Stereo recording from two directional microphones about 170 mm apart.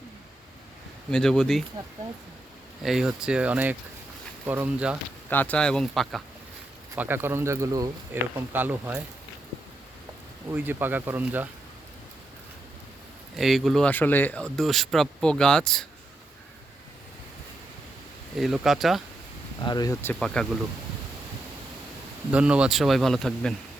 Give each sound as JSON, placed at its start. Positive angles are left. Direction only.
{"t": 1.1, "sound": "speech", "side_deg": 5}
{"t": 2.8, "sound": "speech", "side_deg": 0}
{"t": 5.3, "sound": "speech", "side_deg": 10}
{"t": 6.9, "sound": "speech", "side_deg": -10}
{"t": 10.5, "sound": "speech", "side_deg": -10}
{"t": 13.3, "sound": "speech", "side_deg": 0}
{"t": 18.3, "sound": "speech", "side_deg": 0}
{"t": 19.6, "sound": "speech", "side_deg": 25}
{"t": 20.1, "sound": "speech", "side_deg": 0}
{"t": 22.3, "sound": "speech", "side_deg": -5}